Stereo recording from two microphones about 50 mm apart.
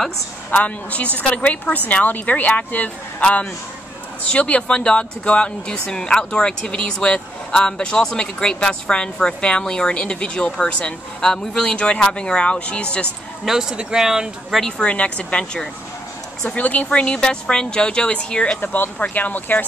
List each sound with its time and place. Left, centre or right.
0.5 s a woman's voice: left
13.5 s speech: centre
14.8 s speech: left
18.6 s a woman's voice: left